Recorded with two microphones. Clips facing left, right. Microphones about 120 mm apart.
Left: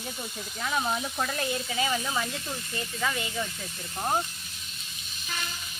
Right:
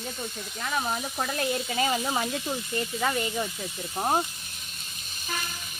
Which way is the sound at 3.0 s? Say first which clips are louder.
Right 2 dB; 30° right (ahead or behind).